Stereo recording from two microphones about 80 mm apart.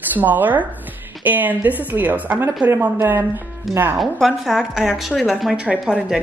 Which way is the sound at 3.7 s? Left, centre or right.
Centre.